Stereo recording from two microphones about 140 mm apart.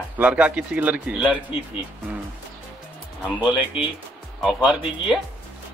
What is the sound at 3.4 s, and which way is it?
Speech, 5° right (ahead or behind).